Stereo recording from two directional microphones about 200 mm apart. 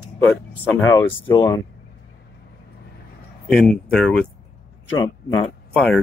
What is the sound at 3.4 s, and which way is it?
Speech, 5° left (ahead or behind).